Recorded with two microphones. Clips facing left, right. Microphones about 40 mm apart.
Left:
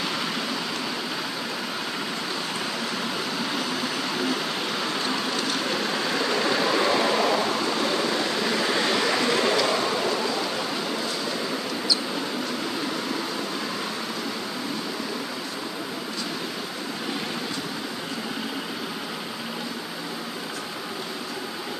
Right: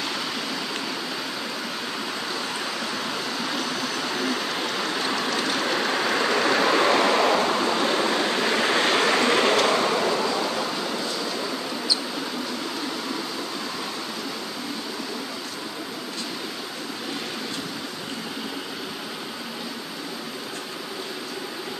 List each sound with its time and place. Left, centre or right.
5.8 s vehicle: right